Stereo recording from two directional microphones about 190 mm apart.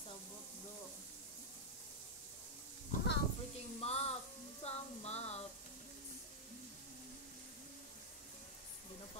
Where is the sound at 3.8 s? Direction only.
35° left (ahead or behind).